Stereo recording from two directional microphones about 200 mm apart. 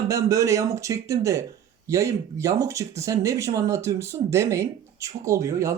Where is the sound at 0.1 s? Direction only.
15° right (ahead or behind).